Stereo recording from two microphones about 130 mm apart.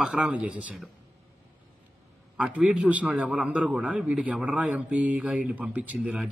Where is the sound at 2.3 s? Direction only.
5° right (ahead or behind).